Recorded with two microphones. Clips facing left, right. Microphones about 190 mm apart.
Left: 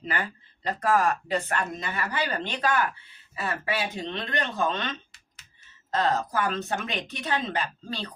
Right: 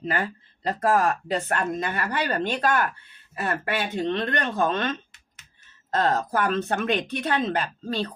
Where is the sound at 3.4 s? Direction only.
65° right (ahead or behind).